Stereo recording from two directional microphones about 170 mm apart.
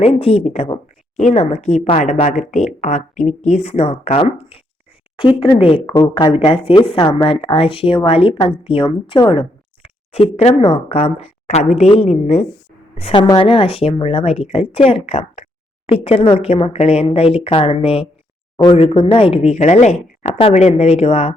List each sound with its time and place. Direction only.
0.0 s speech: 35° left (ahead or behind)